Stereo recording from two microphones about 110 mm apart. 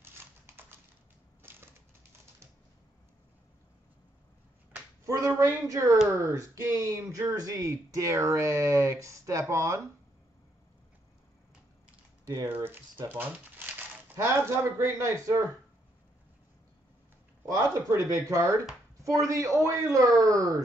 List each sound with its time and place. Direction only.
0.0 s typing: 20° right (ahead or behind)
1.4 s crushing: 20° right (ahead or behind)
5.0 s a woman's voice: 30° right (ahead or behind)
12.4 s speech: 20° right (ahead or behind)
17.6 s speech: 30° left (ahead or behind)
18.1 s a woman's voice: 30° right (ahead or behind)